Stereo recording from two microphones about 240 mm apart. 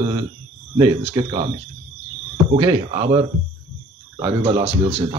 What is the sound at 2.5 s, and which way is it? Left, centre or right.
Speech, centre.